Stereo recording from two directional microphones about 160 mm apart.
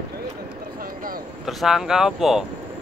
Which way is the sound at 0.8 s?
65° right (ahead or behind).